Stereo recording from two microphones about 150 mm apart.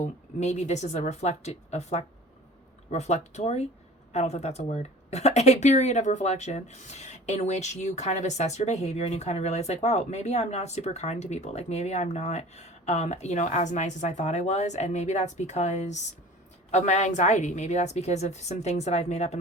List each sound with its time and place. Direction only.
0.0 s speech: 50° left (ahead or behind)